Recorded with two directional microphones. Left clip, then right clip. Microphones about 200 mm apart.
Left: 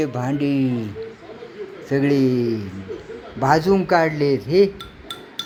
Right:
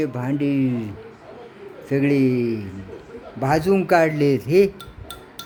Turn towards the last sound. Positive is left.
turn(degrees=-35)  # may be behind; listen again after turning